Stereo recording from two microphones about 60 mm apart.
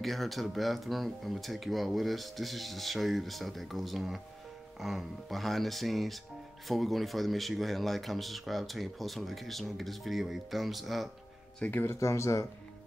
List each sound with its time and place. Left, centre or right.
0.0 s speech: centre
11.7 s speech: left
12.0 s speech: left